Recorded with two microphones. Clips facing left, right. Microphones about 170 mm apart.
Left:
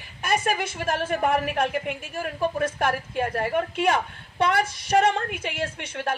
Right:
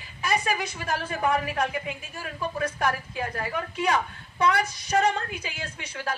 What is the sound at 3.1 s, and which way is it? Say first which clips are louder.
A woman's voice: left 6 dB; 60° left (ahead or behind).